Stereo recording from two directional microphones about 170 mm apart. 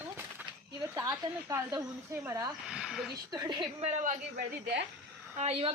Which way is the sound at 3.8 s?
45° right (ahead or behind).